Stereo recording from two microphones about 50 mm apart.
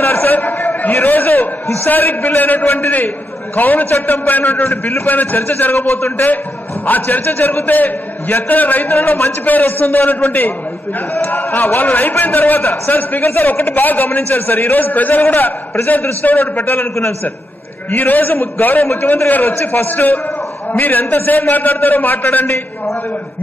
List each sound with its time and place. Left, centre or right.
0.0 s a sound: left
1.9 s a man's voice: left
17.9 s a man's voice: left